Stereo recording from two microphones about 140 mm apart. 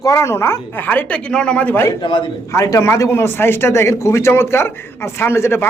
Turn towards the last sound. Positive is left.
turn(degrees=15)  # may be behind; listen again after turning